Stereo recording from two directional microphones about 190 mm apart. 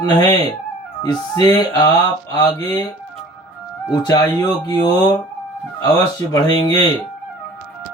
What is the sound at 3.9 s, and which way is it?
Music, 20° left (ahead or behind).